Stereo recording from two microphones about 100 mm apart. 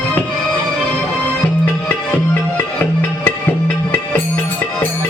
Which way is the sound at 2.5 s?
20° left (ahead or behind).